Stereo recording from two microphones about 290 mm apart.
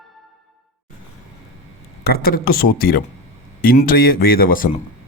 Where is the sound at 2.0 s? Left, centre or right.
Left.